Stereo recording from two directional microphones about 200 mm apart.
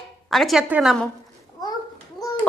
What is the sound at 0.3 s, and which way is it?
Speech, centre (ahead or behind).